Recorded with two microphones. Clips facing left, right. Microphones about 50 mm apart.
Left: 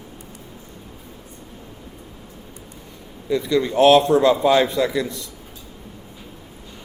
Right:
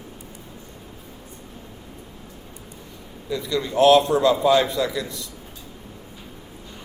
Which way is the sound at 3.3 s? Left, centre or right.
Left.